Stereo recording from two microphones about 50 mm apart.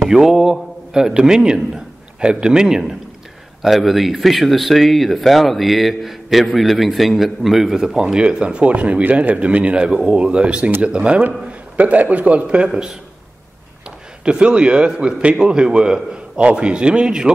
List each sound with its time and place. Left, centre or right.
0.1 s a man's voice: centre
3.6 s a man's voice: centre
11.7 s a man's voice: right; by 12.9 s centre
14.2 s a man's voice: right